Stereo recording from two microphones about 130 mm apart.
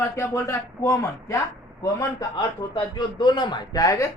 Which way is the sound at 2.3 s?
35° left (ahead or behind).